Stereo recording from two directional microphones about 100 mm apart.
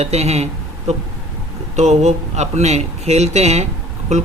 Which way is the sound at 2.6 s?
90° right.